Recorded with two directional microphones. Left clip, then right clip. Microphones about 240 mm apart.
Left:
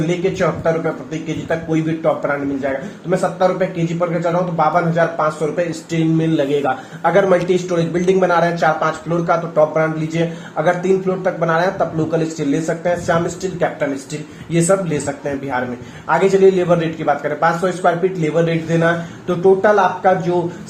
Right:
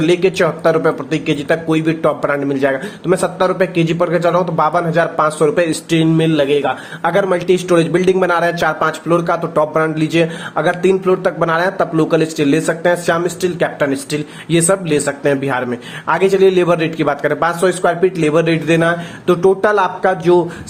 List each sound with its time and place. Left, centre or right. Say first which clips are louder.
0.3 s a man's voice: right 4 dB; right